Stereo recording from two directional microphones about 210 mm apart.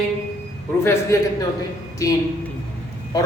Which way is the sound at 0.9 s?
15° left (ahead or behind).